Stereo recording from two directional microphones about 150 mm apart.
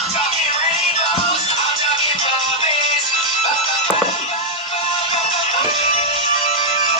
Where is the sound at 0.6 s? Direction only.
45° left (ahead or behind).